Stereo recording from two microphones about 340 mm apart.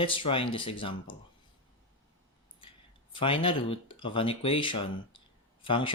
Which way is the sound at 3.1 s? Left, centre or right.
Centre.